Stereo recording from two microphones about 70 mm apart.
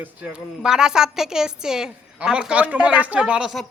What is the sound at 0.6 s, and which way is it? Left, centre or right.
A woman's voice, centre.